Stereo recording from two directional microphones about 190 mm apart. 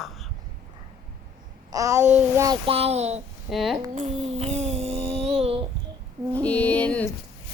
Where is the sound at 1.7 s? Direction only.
15° right (ahead or behind).